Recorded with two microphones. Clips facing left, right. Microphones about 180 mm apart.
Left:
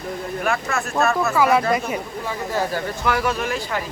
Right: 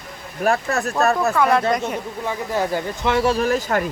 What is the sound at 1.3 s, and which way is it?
Speech, 5° left (ahead or behind).